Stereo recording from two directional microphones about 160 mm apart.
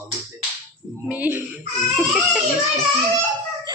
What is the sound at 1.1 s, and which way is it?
Speech, 10° right (ahead or behind).